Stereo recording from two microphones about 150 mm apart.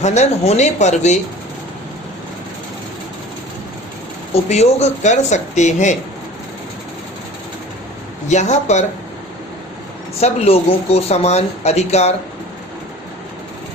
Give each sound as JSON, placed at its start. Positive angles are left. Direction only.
{"t": 0.0, "sound": "speech", "side_deg": 50}
{"t": 4.4, "sound": "speech", "side_deg": 45}
{"t": 8.3, "sound": "speech", "side_deg": 50}
{"t": 10.2, "sound": "speech", "side_deg": 45}